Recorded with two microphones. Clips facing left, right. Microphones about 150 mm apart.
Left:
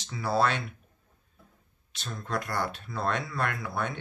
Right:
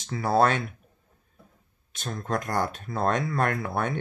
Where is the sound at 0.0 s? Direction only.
50° right (ahead or behind).